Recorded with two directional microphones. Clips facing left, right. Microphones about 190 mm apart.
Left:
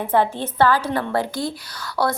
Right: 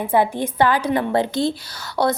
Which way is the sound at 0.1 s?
10° right (ahead or behind).